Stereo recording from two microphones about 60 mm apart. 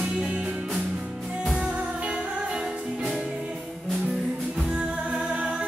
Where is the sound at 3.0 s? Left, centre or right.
Centre.